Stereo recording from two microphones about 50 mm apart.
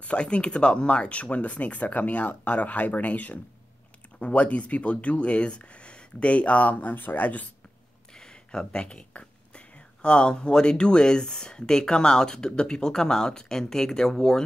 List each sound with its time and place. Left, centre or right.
0.0 s speech: left
8.1 s a sound: centre
10.0 s speech: centre